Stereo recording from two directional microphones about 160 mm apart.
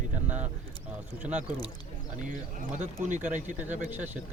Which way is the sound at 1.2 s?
10° right (ahead or behind).